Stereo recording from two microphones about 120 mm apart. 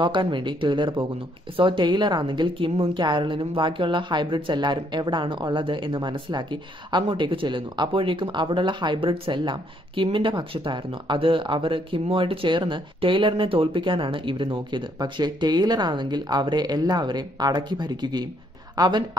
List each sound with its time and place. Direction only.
0.0 s a woman's voice: 40° right (ahead or behind)